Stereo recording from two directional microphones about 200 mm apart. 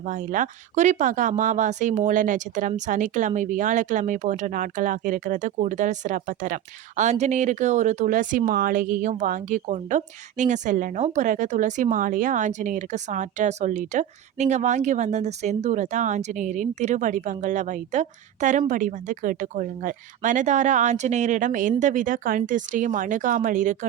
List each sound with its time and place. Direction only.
0.0 s speech: 40° right (ahead or behind)